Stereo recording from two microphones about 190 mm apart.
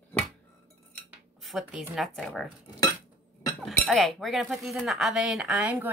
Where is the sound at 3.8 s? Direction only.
Centre (ahead or behind).